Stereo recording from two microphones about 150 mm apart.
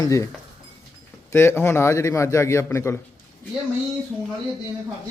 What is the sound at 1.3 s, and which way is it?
A man's voice, 15° left (ahead or behind).